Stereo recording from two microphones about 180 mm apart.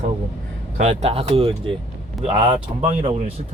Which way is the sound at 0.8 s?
35° right (ahead or behind).